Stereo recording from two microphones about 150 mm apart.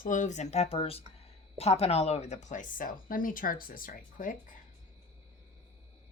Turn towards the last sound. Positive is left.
turn(degrees=60)  # may be behind; listen again after turning